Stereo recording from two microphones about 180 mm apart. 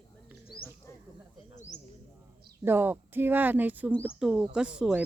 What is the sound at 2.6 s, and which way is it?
Speech, 10° right (ahead or behind).